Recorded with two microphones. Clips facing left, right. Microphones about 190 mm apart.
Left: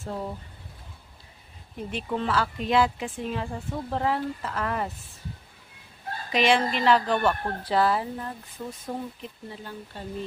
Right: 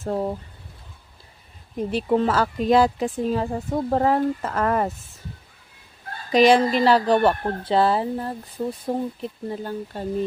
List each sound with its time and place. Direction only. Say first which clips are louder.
0.0 s speech: right 8 dB; 45° right (ahead or behind)
1.9 s a woman's voice: right 7 dB; 40° right (ahead or behind)
6.3 s a woman's voice: right 7 dB; 40° right (ahead or behind)